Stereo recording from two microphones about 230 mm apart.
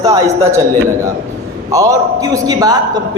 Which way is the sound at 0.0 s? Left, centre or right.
Centre.